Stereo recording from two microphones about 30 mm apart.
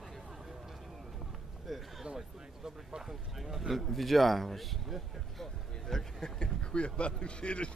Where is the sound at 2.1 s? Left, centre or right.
Centre.